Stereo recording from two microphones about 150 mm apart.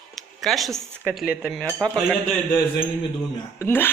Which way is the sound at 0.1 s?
Centre (ahead or behind).